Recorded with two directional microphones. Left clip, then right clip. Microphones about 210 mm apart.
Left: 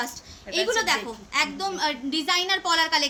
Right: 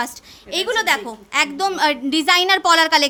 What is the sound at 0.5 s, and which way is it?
A woman's voice, 55° right (ahead or behind).